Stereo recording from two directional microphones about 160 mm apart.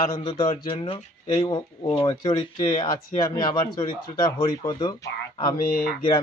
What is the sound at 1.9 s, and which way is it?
Speech, 25° left (ahead or behind).